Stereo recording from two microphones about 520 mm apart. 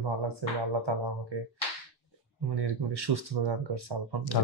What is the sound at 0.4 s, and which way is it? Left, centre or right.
Speech, right.